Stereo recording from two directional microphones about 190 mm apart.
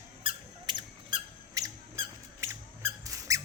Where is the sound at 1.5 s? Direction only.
15° right (ahead or behind).